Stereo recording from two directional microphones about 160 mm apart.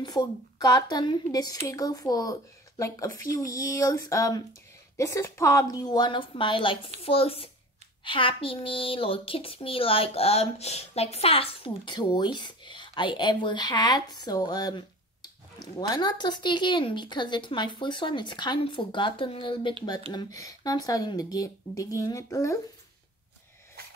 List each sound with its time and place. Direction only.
0.0 s speech: 25° left (ahead or behind)
3.3 s a woman's voice: 20° left (ahead or behind)